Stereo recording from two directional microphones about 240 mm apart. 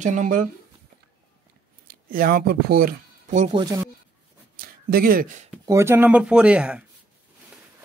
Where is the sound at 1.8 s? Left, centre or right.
Right; by 3.9 s centre.